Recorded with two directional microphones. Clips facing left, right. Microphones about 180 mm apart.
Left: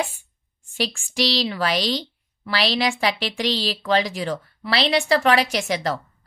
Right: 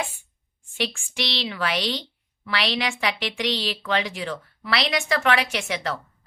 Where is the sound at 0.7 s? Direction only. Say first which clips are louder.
Left 4 dB; 35° left (ahead or behind).